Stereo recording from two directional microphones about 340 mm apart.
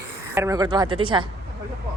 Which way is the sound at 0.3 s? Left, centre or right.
Centre.